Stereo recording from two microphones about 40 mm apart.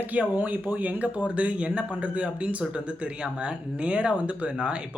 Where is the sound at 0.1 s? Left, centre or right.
Right.